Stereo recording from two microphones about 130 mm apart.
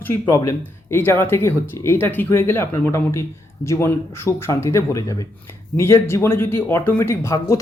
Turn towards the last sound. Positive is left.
turn(degrees=20)  # may be behind; listen again after turning